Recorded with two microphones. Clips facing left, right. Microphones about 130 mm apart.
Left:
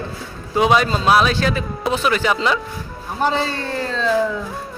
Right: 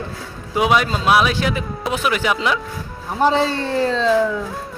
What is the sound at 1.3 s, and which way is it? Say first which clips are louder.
Speech: left 1 dB; 15° right (ahead or behind).